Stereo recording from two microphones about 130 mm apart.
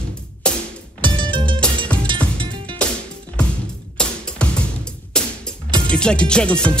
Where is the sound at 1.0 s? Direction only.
40° right (ahead or behind).